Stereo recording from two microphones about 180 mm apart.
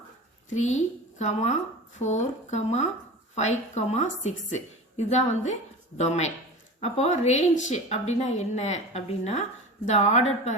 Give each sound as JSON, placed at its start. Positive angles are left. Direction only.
{"t": 0.5, "sound": "a woman's voice", "side_deg": 40}